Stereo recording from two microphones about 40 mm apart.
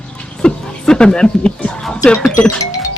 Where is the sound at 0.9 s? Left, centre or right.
Centre.